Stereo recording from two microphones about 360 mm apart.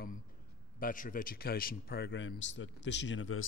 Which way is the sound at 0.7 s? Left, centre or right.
Left.